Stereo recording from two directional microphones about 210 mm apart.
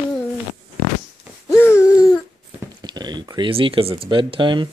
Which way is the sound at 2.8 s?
20° right (ahead or behind).